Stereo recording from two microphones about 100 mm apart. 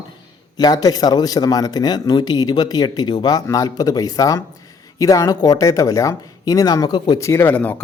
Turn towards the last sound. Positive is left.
turn(degrees=20)  # may be behind; listen again after turning